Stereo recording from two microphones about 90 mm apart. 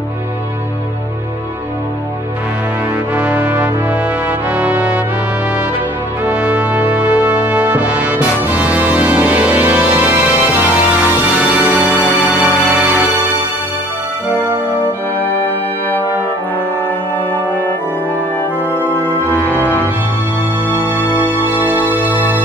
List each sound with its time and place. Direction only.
3.2 s brass instrument: 15° right (ahead or behind)
6.2 s brass instrument: 15° right (ahead or behind)
11.9 s music: 20° left (ahead or behind)
12.3 s music: 15° right (ahead or behind)
15.2 s music: 20° left (ahead or behind)
18.8 s music: 20° left (ahead or behind)
20.7 s music: 20° right (ahead or behind)
21.0 s music: 20° left (ahead or behind)